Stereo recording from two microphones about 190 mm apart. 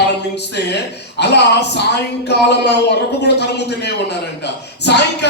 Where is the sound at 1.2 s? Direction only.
60° left (ahead or behind).